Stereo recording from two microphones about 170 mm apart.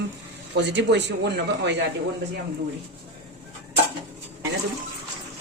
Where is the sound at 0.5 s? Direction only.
90° right.